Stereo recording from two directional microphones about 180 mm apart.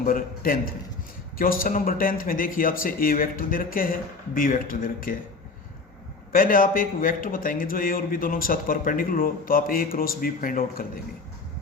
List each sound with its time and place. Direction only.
0.0 s a man's voice: 50° left (ahead or behind)
6.3 s a man's voice: 50° left (ahead or behind)